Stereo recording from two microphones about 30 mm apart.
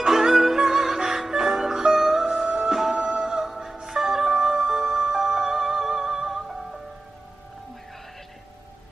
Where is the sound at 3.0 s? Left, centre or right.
Right.